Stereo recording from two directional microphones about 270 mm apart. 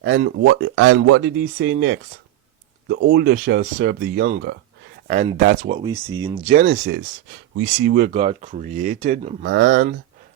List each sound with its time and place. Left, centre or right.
0.4 s speech: right
5.9 s speech: centre
6.5 s speech: right
8.1 s speech: right
9.5 s speech: right